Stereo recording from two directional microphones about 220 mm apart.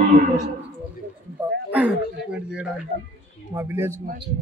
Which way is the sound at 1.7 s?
5° right (ahead or behind).